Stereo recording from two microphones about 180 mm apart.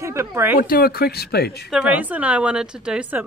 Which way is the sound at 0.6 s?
55° left (ahead or behind).